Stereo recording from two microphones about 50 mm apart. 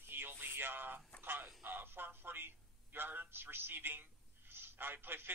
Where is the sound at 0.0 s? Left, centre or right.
Right.